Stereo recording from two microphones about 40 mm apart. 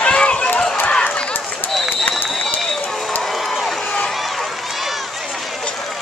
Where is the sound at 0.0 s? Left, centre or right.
Left.